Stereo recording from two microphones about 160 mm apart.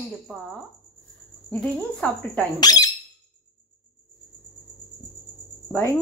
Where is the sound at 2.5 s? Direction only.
25° left (ahead or behind).